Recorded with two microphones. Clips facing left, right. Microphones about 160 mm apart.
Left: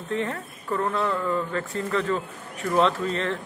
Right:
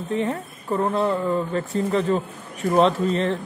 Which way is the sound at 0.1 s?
15° right (ahead or behind).